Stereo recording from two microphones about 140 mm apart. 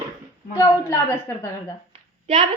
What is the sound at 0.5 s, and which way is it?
Speech, 20° left (ahead or behind).